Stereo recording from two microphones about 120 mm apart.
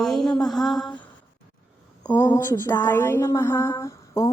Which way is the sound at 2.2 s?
25° left (ahead or behind).